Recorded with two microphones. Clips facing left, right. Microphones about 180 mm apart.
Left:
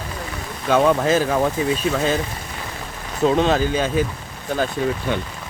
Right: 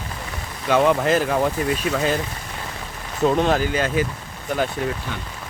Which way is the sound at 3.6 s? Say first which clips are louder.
Left 2 dB; 10° right (ahead or behind).